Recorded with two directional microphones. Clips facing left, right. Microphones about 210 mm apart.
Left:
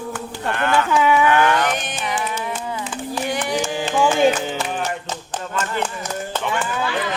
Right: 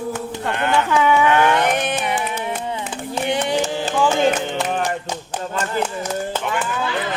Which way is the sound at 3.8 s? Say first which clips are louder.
Left 4 dB; 10° left (ahead or behind).